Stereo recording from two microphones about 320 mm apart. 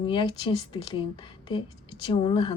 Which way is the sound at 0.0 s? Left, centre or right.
Centre.